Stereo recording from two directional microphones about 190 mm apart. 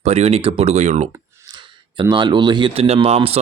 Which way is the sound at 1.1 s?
20° right (ahead or behind).